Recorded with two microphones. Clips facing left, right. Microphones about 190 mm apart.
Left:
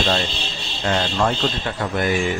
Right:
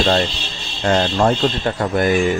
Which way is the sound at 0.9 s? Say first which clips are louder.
Right 5 dB; 40° right (ahead or behind).